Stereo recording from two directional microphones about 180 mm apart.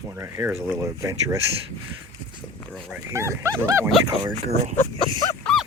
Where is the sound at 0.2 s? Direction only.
15° right (ahead or behind).